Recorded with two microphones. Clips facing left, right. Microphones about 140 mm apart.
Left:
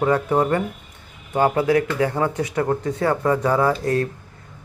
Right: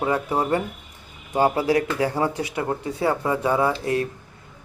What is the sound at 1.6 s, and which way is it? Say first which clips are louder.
Speech: left 2 dB; 35° right (ahead or behind).